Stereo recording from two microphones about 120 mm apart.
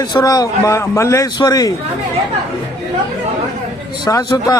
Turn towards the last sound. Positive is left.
turn(degrees=35)  # may be behind; listen again after turning